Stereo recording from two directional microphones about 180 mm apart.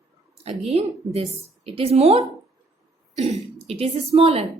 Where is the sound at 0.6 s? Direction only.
35° right (ahead or behind).